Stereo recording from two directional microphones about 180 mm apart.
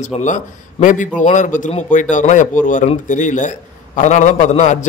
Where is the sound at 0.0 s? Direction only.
45° left (ahead or behind).